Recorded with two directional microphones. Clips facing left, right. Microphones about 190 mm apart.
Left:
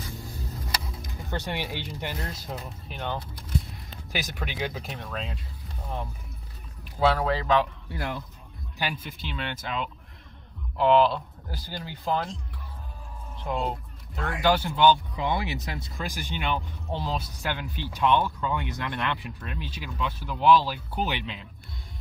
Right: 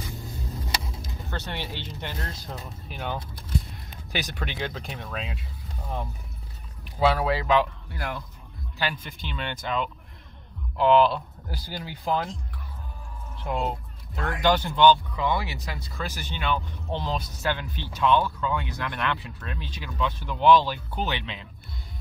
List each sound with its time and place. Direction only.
1.3 s speech: 15° left (ahead or behind)
2.9 s speech: 5° right (ahead or behind)
4.1 s speech: 5° left (ahead or behind)
7.0 s speech: 10° right (ahead or behind)
8.7 s speech: 10° left (ahead or behind)
11.5 s speech: 10° right (ahead or behind)
13.5 s fowl: 5° right (ahead or behind)
14.3 s speech: 10° left (ahead or behind)
15.1 s speech: 20° left (ahead or behind)
16.9 s speech: 5° left (ahead or behind)